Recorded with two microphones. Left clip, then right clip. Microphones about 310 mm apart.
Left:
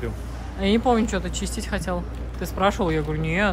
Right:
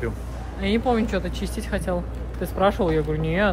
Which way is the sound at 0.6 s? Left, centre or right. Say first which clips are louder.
Left 2 dB; centre.